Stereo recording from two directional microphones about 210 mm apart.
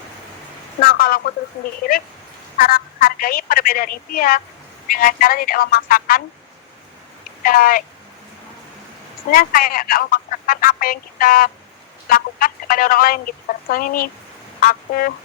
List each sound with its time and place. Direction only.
0.8 s speech: 45° left (ahead or behind)
2.6 s speech: 45° left (ahead or behind)
7.4 s speech: 45° left (ahead or behind)
9.3 s a woman's voice: 40° left (ahead or behind)
14.6 s a sound: 40° left (ahead or behind)